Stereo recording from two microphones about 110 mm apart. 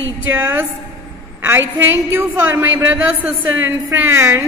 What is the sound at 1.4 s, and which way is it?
A woman's voice, 20° right (ahead or behind).